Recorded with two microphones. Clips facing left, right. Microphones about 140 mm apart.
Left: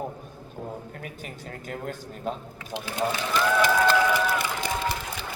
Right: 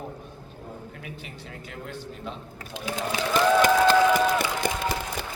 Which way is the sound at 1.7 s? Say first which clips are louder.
Left 3 dB; 45° left (ahead or behind).